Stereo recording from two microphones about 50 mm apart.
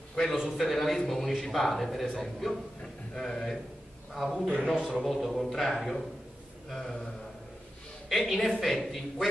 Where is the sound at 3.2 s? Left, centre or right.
Centre.